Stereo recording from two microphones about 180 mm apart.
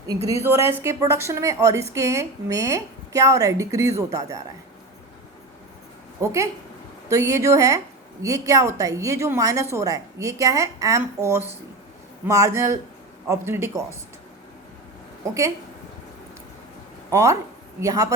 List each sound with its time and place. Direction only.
0.3 s a woman's voice: 15° right (ahead or behind)
6.2 s a woman's voice: 15° right (ahead or behind)
15.2 s a woman's voice: 15° right (ahead or behind)
17.1 s a woman's voice: 15° right (ahead or behind)